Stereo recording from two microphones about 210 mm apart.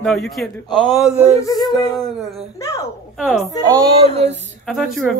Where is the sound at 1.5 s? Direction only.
15° left (ahead or behind).